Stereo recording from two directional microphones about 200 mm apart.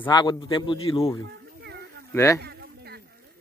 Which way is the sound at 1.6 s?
55° right (ahead or behind).